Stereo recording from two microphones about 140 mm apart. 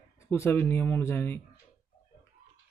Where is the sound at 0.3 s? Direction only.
15° left (ahead or behind).